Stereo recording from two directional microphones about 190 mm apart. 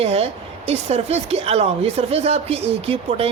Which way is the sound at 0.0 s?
30° right (ahead or behind).